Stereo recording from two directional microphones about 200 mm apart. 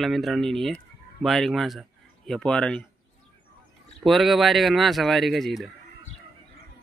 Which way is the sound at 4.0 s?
Centre (ahead or behind).